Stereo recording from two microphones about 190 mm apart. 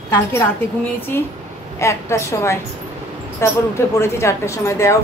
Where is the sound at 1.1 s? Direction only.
10° left (ahead or behind).